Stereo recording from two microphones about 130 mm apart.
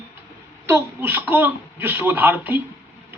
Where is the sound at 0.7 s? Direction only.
20° right (ahead or behind).